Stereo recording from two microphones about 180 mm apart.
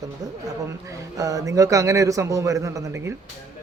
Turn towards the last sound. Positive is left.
turn(degrees=-15)  # may be behind; listen again after turning